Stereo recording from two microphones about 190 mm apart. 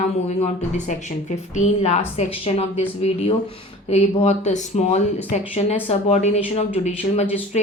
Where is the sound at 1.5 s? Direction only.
35° left (ahead or behind).